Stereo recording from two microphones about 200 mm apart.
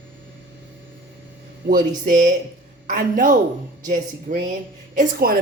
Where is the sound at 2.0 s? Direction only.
40° right (ahead or behind).